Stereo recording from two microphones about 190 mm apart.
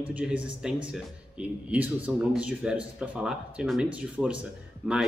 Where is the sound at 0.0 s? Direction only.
5° right (ahead or behind).